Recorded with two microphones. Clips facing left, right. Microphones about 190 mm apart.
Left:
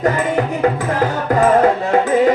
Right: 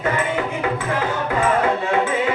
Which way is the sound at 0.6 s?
40° left (ahead or behind).